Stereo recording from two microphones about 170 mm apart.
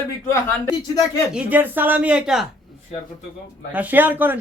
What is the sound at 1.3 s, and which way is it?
Speech, 10° right (ahead or behind).